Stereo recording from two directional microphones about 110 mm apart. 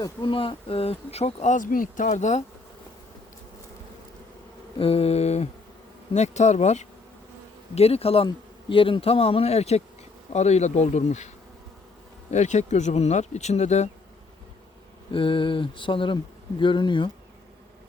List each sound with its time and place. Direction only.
0.2 s speech: 50° left (ahead or behind); by 2.4 s 90° left
4.8 s mantra: 60° left (ahead or behind); by 5.5 s 80° left
6.1 s speech: 90° left
7.8 s speech: 65° left (ahead or behind)
10.3 s speech: 90° left
12.3 s speech: 90° left
15.1 s a sound: 50° left (ahead or behind)